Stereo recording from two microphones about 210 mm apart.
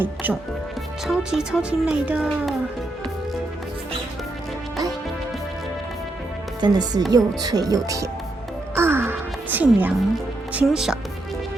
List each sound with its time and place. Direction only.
0.0 s speech: 10° right (ahead or behind)
6.6 s speech: 20° right (ahead or behind)
8.7 s music: 10° right (ahead or behind)
10.5 s speech: 5° right (ahead or behind)